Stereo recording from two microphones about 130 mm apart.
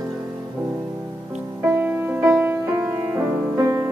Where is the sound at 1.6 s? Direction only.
10° right (ahead or behind).